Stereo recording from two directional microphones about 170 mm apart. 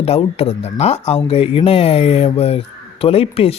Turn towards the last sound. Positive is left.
turn(degrees=35)  # may be behind; listen again after turning